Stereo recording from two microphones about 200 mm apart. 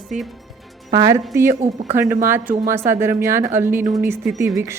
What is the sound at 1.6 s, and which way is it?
Speech, 35° right (ahead or behind).